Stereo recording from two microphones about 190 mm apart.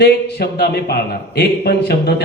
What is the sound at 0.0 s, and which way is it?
Speech, 60° left (ahead or behind).